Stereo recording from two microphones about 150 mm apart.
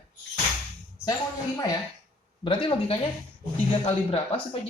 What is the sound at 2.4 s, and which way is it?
Speech, 35° left (ahead or behind).